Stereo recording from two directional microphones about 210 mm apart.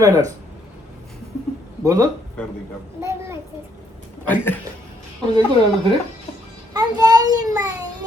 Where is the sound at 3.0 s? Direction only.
15° right (ahead or behind).